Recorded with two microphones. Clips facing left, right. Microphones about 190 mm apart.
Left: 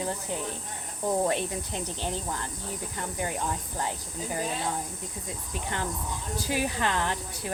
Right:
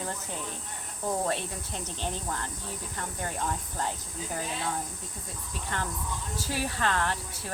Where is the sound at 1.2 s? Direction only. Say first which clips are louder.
Left 4 dB; 15° left (ahead or behind).